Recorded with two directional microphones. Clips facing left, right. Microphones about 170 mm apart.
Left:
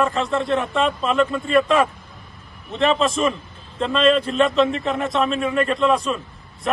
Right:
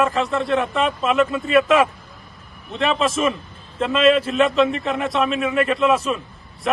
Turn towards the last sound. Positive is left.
turn(degrees=-5)  # may be behind; listen again after turning